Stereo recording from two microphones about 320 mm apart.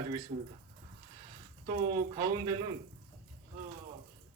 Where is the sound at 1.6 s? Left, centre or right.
Centre.